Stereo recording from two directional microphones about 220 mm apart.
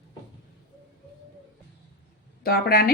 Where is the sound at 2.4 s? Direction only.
45° left (ahead or behind).